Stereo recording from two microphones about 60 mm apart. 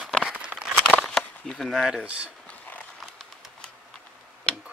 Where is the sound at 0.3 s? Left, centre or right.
Centre.